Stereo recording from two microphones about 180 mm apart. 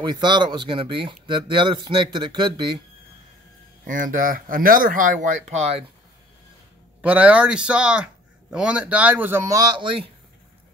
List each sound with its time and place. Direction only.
0.0 s speech: 25° right (ahead or behind)
3.8 s speech: 50° right (ahead or behind)
7.0 s a man's voice: 5° right (ahead or behind); by 9.9 s 25° right (ahead or behind)